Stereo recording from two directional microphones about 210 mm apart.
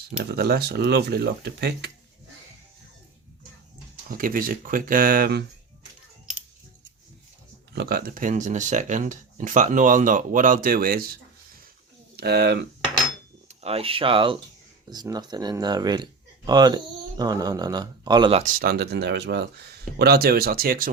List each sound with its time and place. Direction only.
0.2 s speech: 50° right (ahead or behind)
4.1 s speech: 45° right (ahead or behind)
7.7 s speech: 50° right (ahead or behind)
13.5 s speech: 30° right (ahead or behind)